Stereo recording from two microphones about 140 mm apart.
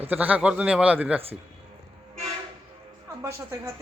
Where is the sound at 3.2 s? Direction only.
20° right (ahead or behind).